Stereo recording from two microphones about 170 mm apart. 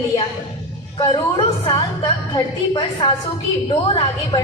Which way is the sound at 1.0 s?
30° left (ahead or behind).